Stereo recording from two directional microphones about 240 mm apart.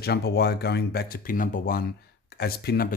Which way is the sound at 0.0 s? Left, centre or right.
Left.